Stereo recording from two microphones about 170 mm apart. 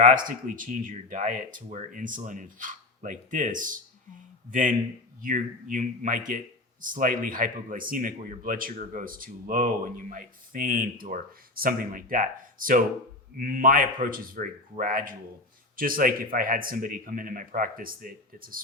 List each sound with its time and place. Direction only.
0.0 s speech: 50° right (ahead or behind)
5.2 s speech: 50° right (ahead or behind)